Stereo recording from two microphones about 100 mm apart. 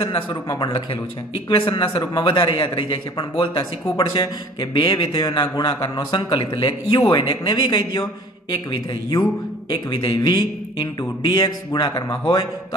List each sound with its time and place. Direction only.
0.0 s speech: 60° left (ahead or behind)
0.5 s a man's voice: 50° left (ahead or behind)
9.7 s a man's voice: 55° left (ahead or behind)